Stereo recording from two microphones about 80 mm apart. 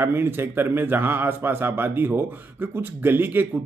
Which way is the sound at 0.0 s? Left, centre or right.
Right.